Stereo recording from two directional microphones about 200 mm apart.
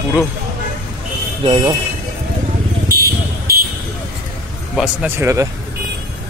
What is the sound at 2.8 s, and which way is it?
Vehicle, 50° right (ahead or behind).